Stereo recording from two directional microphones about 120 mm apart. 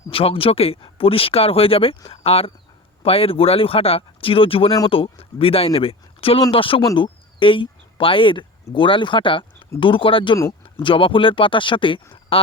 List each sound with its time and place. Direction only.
0.1 s speech: 50° left (ahead or behind)